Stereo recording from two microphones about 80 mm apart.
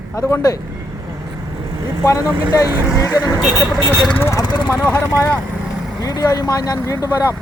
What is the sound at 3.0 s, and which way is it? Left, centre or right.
Speech, left.